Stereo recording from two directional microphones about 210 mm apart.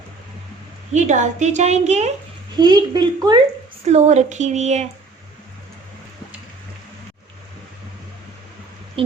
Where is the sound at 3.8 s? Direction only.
30° right (ahead or behind).